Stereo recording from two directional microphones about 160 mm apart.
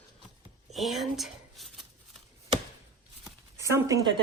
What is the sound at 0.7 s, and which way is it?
Speech, centre (ahead or behind).